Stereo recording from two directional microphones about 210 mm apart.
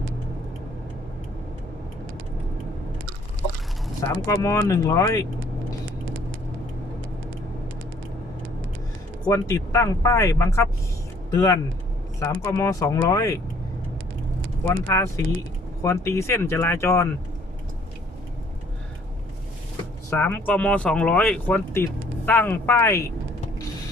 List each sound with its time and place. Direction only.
4.3 s speech: 15° left (ahead or behind)
9.2 s speech: 15° left (ahead or behind)
14.9 s speech: 15° left (ahead or behind)
20.1 s speech: 10° left (ahead or behind)